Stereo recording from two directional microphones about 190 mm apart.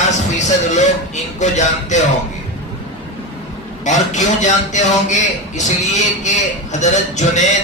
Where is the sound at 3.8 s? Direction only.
40° left (ahead or behind).